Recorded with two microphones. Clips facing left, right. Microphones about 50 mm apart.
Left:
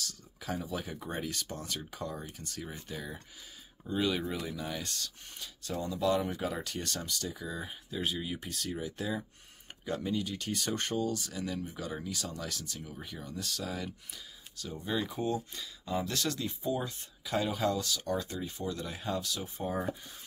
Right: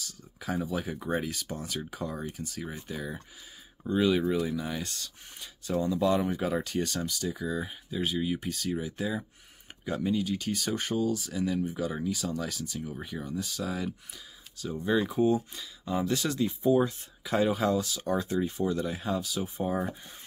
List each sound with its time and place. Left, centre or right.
0.0 s a sound: centre
1.1 s speech: centre
15.5 s speech: centre